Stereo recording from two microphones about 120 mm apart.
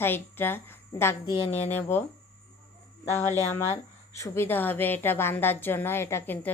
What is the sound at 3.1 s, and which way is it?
A woman's voice, 20° left (ahead or behind).